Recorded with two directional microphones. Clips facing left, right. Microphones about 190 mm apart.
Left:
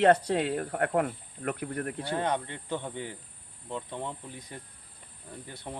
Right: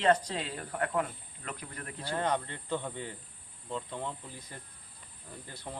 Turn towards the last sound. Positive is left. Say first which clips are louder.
# left 2 dB
turn(degrees=20)  # may be behind; listen again after turning